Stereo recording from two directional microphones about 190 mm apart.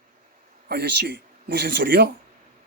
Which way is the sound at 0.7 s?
60° right (ahead or behind).